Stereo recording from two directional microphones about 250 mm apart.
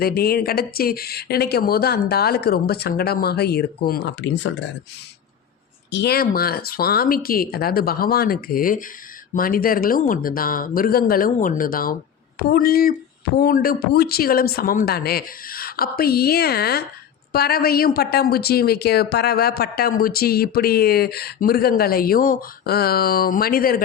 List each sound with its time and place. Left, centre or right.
0.0 s speech: left
5.9 s speech: left